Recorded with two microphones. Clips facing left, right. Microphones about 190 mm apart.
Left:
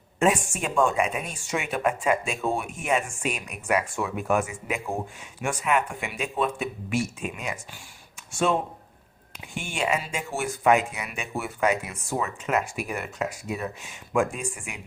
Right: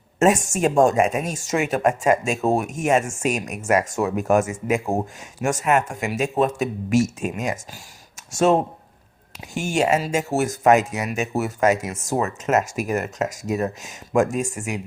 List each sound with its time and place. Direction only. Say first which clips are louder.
0.2 s speech: right 6 dB; 45° right (ahead or behind)